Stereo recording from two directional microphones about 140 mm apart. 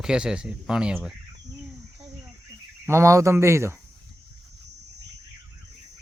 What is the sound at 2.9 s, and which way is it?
Speech, 20° right (ahead or behind).